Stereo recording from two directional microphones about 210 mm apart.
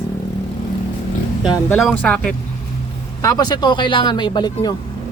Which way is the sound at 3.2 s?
15° left (ahead or behind).